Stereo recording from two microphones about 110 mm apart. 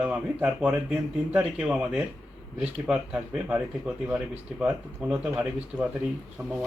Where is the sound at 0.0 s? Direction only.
15° right (ahead or behind).